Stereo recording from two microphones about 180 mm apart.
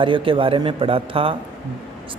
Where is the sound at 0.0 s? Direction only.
30° right (ahead or behind).